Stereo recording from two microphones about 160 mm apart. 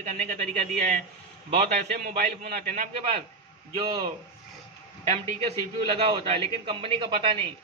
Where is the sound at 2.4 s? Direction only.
60° right (ahead or behind).